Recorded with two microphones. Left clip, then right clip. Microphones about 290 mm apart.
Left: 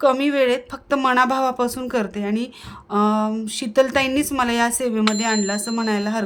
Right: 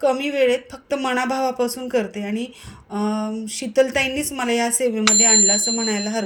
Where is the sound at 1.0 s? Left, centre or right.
Centre.